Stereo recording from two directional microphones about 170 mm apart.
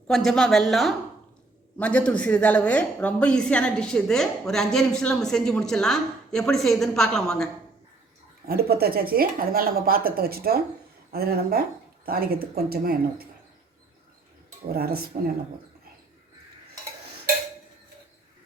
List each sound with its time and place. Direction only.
0.1 s speech: centre (ahead or behind)
8.4 s speech: 65° right (ahead or behind)
14.7 s speech: 65° right (ahead or behind)